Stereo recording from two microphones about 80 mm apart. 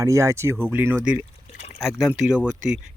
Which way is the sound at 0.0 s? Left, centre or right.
Right.